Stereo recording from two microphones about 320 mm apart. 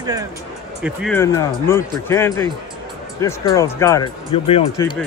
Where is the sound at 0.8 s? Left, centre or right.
Centre.